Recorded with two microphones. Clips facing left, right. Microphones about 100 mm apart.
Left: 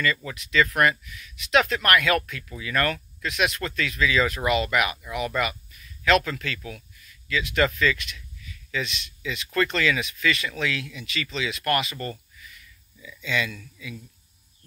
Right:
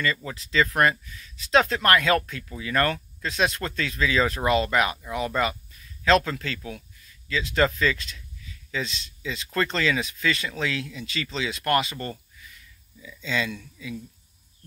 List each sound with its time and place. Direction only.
0.0 s speech: 25° right (ahead or behind)